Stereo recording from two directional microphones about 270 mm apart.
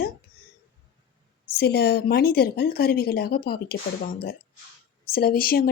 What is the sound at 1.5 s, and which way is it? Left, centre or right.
Speech, left.